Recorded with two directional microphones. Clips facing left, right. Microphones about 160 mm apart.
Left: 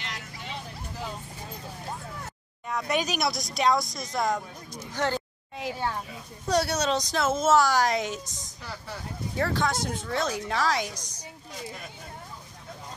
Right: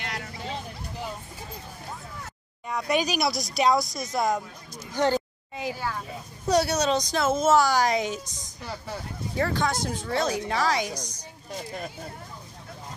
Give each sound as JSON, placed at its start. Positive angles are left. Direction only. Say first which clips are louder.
{"t": 0.0, "sound": "vehicle", "louder": "right 4 dB", "side_deg": -55}
{"t": 2.7, "sound": "speech", "louder": "right 2 dB", "side_deg": 0}
{"t": 4.9, "sound": "speech", "louder": "right 5 dB", "side_deg": -15}
{"t": 6.5, "sound": "speech", "louder": "right 2 dB", "side_deg": 0}
{"t": 9.4, "sound": "speech", "louder": "right 1 dB", "side_deg": 0}